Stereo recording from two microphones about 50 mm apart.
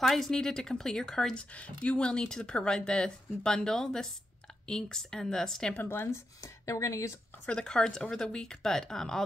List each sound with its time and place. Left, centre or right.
0.0 s speech: centre
1.3 s speech: left; by 5.7 s centre
6.0 s speech: left
7.5 s speech: centre